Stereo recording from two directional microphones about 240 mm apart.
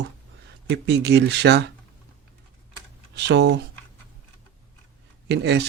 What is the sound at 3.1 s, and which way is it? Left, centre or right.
Speech, right.